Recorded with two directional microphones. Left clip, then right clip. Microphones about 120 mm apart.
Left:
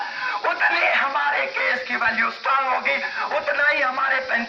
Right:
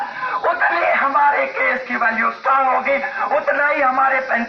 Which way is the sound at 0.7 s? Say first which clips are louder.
Right 4 dB; 40° left (ahead or behind).